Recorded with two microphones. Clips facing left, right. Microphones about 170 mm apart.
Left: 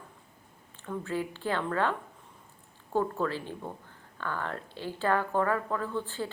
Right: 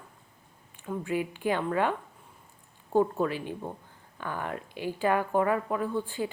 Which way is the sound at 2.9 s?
15° right (ahead or behind).